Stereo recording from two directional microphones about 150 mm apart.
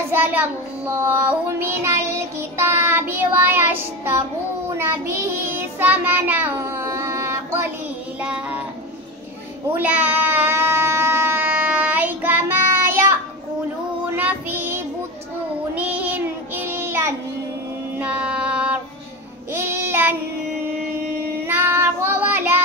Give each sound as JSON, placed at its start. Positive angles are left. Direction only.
{"t": 0.1, "sound": "child singing", "side_deg": -15}
{"t": 8.2, "sound": "child singing", "side_deg": -5}
{"t": 9.8, "sound": "a sound", "side_deg": -10}
{"t": 14.1, "sound": "child singing", "side_deg": -15}
{"t": 21.4, "sound": "child singing", "side_deg": -15}